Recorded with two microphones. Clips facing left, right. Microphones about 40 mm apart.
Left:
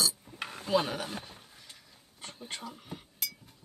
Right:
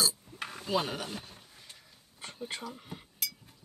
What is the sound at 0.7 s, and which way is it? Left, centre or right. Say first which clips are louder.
Chopping: left 3 dB; centre.